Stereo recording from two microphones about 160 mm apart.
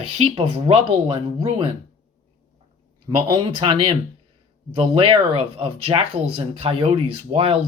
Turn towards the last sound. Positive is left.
turn(degrees=-35)  # may be behind; listen again after turning